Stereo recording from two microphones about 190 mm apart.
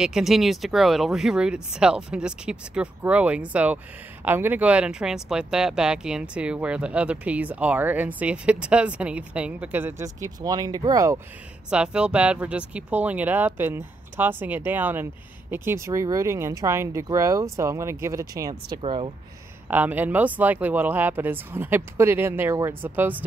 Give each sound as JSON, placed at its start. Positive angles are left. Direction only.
{"t": 0.0, "sound": "speech", "side_deg": -5}
{"t": 11.7, "sound": "speech", "side_deg": -5}
{"t": 19.7, "sound": "speech", "side_deg": -10}